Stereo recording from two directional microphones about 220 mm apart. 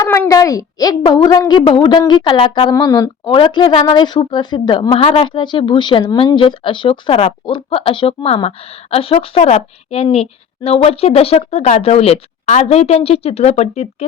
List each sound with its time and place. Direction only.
0.0 s a woman's voice: 15° left (ahead or behind); by 13.8 s 30° left (ahead or behind)